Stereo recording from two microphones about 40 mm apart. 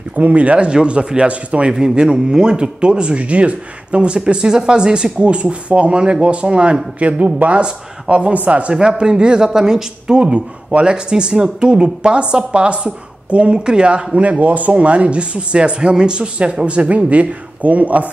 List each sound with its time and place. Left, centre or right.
0.1 s speech: right
1.7 s speech: centre
8.7 s speech: centre; by 18.1 s right